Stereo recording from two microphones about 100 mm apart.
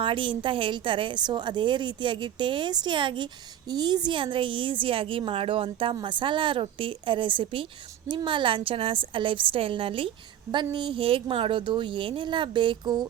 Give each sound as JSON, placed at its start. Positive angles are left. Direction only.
{"t": 0.0, "sound": "a woman's voice", "side_deg": -55}
{"t": 10.5, "sound": "a woman's voice", "side_deg": -50}